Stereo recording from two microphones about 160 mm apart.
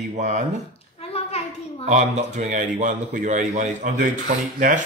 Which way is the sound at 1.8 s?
45° right (ahead or behind).